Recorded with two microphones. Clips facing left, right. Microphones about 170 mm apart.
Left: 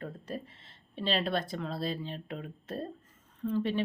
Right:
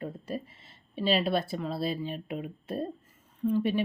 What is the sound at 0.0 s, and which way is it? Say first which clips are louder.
Speech: right 3 dB; 10° right (ahead or behind).